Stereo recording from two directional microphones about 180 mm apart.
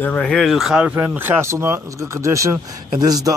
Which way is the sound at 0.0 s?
5° left (ahead or behind).